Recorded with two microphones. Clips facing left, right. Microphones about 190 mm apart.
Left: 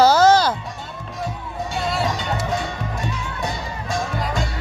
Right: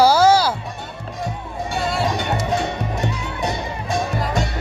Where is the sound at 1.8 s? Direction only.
Centre (ahead or behind).